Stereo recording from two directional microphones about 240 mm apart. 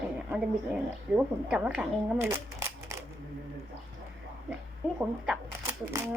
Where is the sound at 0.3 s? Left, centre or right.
Centre.